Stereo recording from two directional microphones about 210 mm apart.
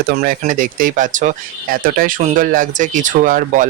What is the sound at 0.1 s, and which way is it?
Speech, 40° right (ahead or behind).